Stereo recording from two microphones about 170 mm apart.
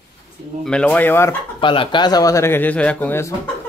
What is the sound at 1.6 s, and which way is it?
Speech, 30° left (ahead or behind).